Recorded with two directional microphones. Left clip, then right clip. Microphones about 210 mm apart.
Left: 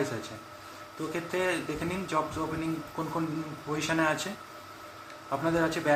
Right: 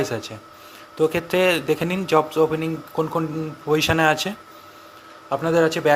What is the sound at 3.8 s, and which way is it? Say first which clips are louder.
Speech: right 8 dB; 40° right (ahead or behind).